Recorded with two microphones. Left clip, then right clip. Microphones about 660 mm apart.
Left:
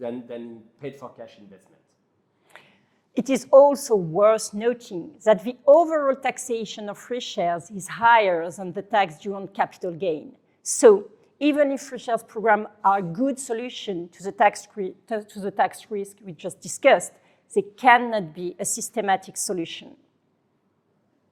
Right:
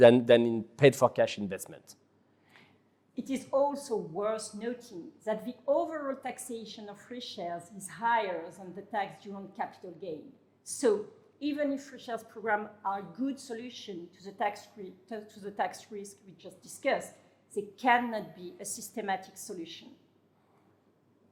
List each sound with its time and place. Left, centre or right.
0.0 s speech: right
3.2 s a woman's voice: left